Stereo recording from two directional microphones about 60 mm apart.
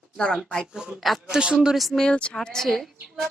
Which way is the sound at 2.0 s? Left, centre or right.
Centre.